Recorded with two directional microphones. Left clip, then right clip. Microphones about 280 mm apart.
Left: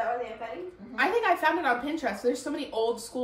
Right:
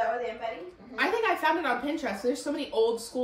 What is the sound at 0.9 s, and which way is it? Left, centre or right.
A woman's voice, centre.